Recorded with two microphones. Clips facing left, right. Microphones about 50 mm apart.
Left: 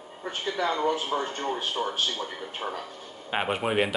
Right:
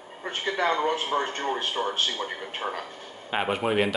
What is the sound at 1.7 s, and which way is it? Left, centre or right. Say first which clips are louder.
Speech: right 1 dB; centre.